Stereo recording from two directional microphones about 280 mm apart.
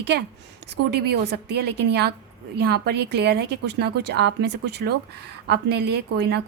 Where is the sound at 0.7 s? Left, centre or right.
Right.